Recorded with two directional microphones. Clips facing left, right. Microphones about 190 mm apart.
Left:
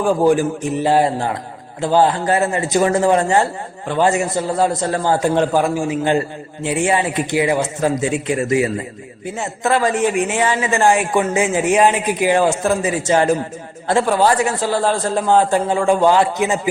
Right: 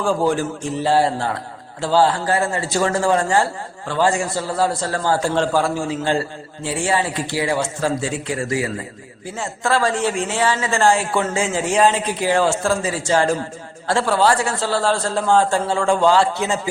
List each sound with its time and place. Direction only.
0.0 s a man's voice: 15° left (ahead or behind)